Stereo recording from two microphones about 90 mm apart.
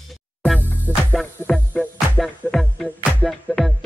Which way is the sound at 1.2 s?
5° left (ahead or behind).